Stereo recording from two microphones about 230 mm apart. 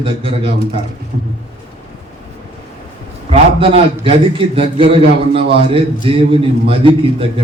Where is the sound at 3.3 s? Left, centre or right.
Right.